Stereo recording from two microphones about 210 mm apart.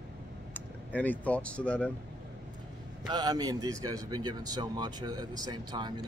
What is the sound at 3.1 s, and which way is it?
Speech, 20° right (ahead or behind).